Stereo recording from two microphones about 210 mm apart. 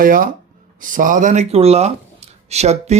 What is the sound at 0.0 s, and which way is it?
Speech, 40° right (ahead or behind).